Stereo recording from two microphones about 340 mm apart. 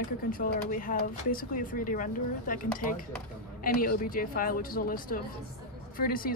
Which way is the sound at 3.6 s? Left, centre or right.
Left.